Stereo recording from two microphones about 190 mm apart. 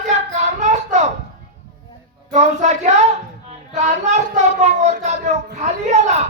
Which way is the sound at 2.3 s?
35° right (ahead or behind).